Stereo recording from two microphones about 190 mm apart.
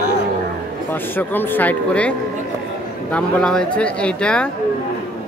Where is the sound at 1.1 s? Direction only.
10° left (ahead or behind).